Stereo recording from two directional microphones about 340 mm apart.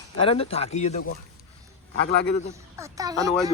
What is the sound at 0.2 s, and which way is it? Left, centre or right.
Speech, centre.